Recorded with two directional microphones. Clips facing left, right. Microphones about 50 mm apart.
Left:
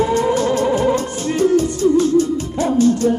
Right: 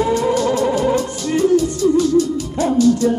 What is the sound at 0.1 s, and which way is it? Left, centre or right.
Music, left.